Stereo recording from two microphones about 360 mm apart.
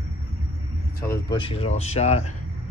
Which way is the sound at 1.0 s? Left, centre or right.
Centre.